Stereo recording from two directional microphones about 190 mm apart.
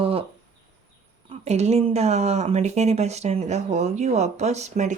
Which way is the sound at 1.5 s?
35° right (ahead or behind).